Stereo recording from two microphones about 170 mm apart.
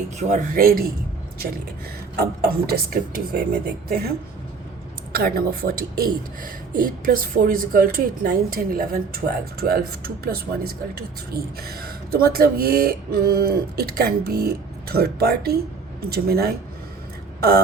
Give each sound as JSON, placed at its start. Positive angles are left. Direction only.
{"t": 0.2, "sound": "a man's voice", "side_deg": -45}
{"t": 2.1, "sound": "speech", "side_deg": -65}
{"t": 5.1, "sound": "speech", "side_deg": -60}